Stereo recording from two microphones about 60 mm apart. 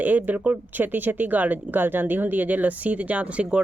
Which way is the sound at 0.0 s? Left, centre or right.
Right.